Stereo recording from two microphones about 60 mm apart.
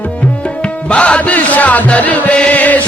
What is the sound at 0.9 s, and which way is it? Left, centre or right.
Music, left.